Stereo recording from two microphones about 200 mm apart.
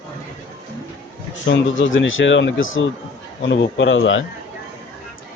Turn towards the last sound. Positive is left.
turn(degrees=75)  # may be behind; listen again after turning